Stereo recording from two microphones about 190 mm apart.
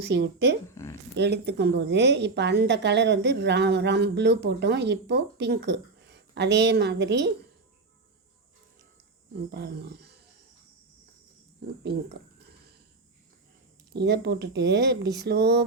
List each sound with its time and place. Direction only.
0.0 s a woman's voice: 60° right (ahead or behind)
0.7 s a sound: 15° left (ahead or behind)
1.1 s a woman's voice: 60° right (ahead or behind)
9.5 s roaring cats: 60° right (ahead or behind)
11.8 s a woman's voice: 60° right (ahead or behind)
13.9 s a woman's voice: 60° right (ahead or behind)